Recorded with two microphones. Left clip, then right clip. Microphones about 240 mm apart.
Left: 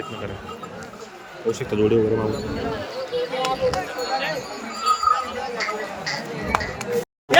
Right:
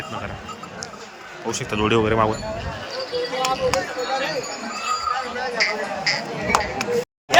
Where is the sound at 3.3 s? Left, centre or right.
Right.